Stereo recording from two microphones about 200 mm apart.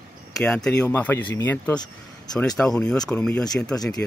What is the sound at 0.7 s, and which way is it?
Speech, 5° left (ahead or behind).